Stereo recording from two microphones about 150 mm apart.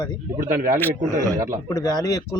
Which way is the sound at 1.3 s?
20° right (ahead or behind).